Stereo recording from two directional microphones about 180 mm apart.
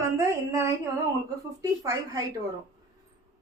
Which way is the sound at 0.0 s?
15° right (ahead or behind).